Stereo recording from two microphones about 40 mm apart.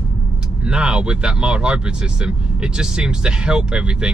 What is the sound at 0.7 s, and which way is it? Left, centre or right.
Speech, right.